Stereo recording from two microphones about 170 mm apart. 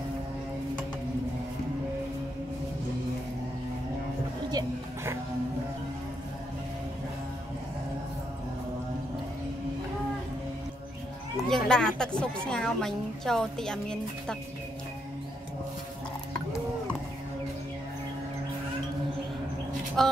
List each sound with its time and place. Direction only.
4.5 s music: 20° right (ahead or behind)
11.4 s a woman's voice: 5° left (ahead or behind)
20.0 s a woman's voice: centre (ahead or behind)